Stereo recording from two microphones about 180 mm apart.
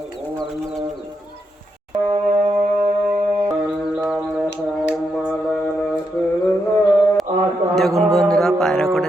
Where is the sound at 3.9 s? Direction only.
5° right (ahead or behind).